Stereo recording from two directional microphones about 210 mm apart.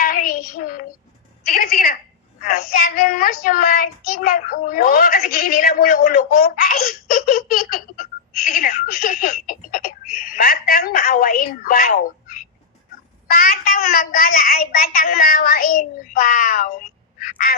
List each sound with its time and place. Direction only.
0.0 s child singing: 40° left (ahead or behind)
1.5 s a woman's voice: 40° left (ahead or behind)
2.4 s child singing: 40° left (ahead or behind)
8.4 s speech: 45° left (ahead or behind)
13.2 s child singing: 45° left (ahead or behind)